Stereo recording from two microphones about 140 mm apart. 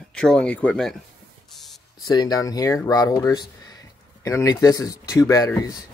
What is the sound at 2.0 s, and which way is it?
Speech, 30° left (ahead or behind).